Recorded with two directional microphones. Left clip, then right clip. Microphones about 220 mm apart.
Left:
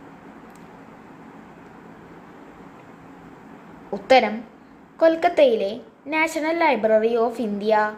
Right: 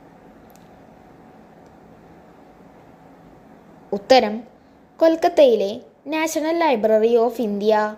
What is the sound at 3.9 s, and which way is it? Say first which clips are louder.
A woman's voice: right 1 dB; 35° right (ahead or behind).